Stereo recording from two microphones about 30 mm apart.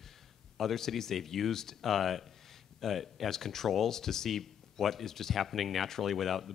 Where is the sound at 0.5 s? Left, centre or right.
Centre.